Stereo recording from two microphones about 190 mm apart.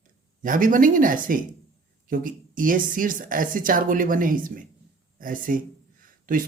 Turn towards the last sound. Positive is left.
turn(degrees=-45)  # may be behind; listen again after turning